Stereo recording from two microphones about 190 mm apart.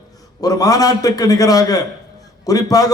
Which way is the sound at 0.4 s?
20° left (ahead or behind).